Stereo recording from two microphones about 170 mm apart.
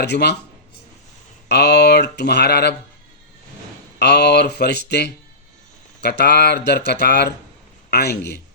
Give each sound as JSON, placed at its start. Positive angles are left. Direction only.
{"t": 0.0, "sound": "speech", "side_deg": 75}
{"t": 1.5, "sound": "speech", "side_deg": 75}
{"t": 3.9, "sound": "a man's voice", "side_deg": 80}